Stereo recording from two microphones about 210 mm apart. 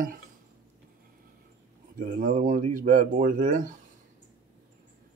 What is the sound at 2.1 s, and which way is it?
Speech, 40° right (ahead or behind).